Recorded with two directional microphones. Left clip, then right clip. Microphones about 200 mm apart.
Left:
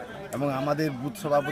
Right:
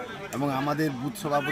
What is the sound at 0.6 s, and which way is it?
Speech, 25° left (ahead or behind).